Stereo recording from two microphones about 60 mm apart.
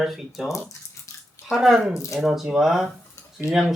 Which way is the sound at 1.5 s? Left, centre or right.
Centre.